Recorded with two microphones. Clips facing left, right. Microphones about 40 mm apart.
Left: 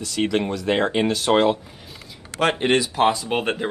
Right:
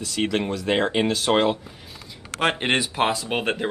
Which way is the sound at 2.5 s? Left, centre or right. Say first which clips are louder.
Left 3 dB; right.